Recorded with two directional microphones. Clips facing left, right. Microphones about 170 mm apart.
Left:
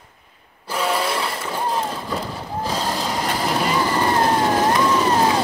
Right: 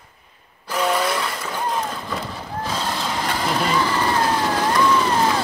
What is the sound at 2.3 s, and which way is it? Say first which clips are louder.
Vehicle: left 2 dB; 10° left (ahead or behind).